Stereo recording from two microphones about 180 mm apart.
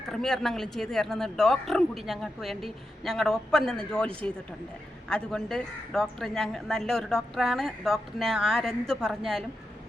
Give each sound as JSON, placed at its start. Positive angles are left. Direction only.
{"t": 0.1, "sound": "a woman's voice", "side_deg": 0}